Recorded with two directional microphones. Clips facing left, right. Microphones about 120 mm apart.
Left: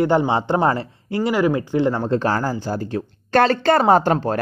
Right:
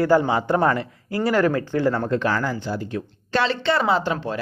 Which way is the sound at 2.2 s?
40° left (ahead or behind).